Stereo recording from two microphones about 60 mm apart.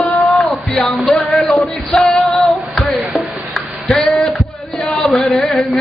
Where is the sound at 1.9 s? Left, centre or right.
Centre.